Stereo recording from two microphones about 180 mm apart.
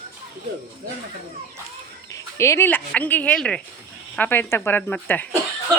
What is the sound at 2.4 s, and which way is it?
Speech, 15° left (ahead or behind).